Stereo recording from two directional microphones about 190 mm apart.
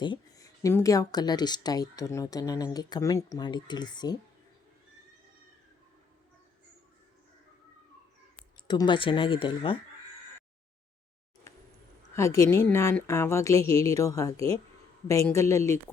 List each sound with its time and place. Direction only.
0.0 s speech: 20° left (ahead or behind)
8.6 s speech: 25° left (ahead or behind)
12.1 s a woman's voice: 15° left (ahead or behind)